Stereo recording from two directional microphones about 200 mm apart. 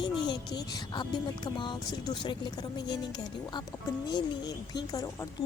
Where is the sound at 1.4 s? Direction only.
25° left (ahead or behind).